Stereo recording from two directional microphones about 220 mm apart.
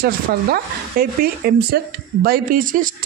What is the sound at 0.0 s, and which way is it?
Speech, 45° right (ahead or behind).